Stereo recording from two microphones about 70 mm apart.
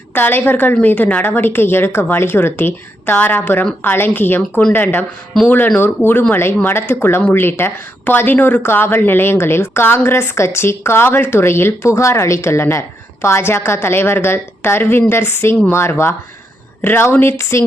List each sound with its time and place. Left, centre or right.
0.1 s a woman's voice: left
7.2 s speech: centre
7.4 s a woman's voice: left